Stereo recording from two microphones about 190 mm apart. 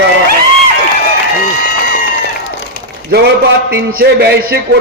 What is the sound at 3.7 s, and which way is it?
Speech, 55° right (ahead or behind).